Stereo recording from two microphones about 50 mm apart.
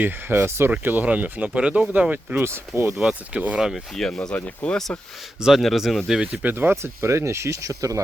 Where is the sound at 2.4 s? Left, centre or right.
Right.